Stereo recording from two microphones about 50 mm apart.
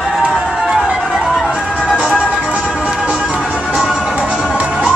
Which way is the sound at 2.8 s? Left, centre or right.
Centre.